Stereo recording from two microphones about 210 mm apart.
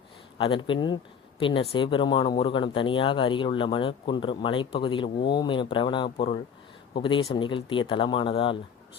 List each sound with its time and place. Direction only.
0.3 s speech: 25° left (ahead or behind)